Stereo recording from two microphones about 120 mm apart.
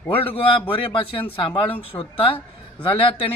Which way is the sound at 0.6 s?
45° left (ahead or behind).